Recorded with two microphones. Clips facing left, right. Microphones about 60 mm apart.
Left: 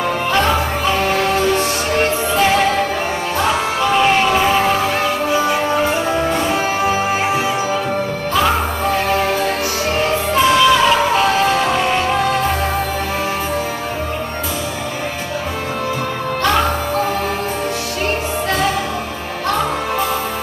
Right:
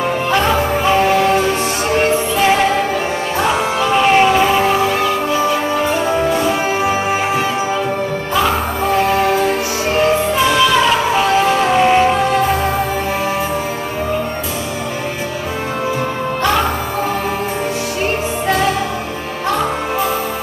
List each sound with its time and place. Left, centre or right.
0.8 s music: centre
2.0 s music: centre
6.5 s music: centre
9.1 s music: centre